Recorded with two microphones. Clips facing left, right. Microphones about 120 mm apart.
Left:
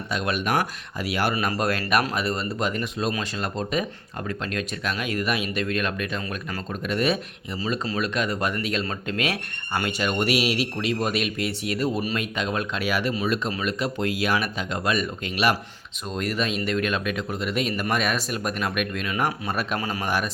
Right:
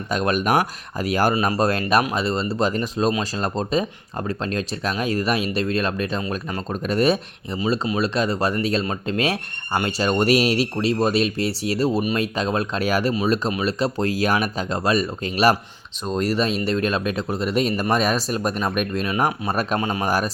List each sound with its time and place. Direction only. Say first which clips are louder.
0.1 s speech: right 5 dB; 40° right (ahead or behind); by 20.1 s 25° right (ahead or behind)
20.1 s speech: right 3 dB; 40° right (ahead or behind)